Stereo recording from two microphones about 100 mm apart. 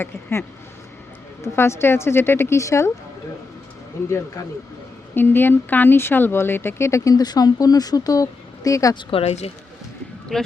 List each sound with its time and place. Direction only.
0.0 s speech: 25° left (ahead or behind)
4.4 s speech: 35° left (ahead or behind)
5.1 s speech: 20° left (ahead or behind)
9.0 s speech: 65° left (ahead or behind)
10.3 s speech: 5° left (ahead or behind)